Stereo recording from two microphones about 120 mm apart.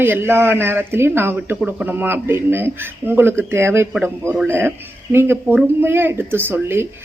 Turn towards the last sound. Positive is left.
turn(degrees=-20)  # may be behind; listen again after turning